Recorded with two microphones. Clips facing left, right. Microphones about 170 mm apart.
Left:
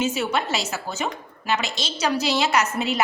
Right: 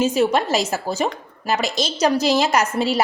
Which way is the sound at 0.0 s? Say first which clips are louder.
Right 6 dB; 35° right (ahead or behind).